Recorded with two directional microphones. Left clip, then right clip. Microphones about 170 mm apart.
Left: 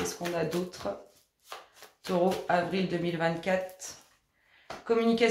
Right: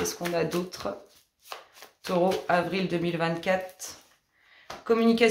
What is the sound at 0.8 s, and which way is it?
Speech, 35° right (ahead or behind).